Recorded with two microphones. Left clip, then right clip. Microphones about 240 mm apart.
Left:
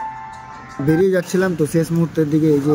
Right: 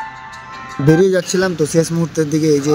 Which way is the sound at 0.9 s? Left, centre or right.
Right.